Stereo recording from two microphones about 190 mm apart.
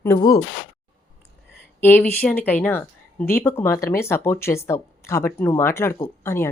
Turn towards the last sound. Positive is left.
turn(degrees=15)  # may be behind; listen again after turning